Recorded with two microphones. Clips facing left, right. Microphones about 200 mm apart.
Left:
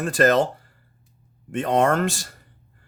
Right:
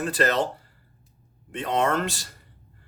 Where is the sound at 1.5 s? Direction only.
45° left (ahead or behind).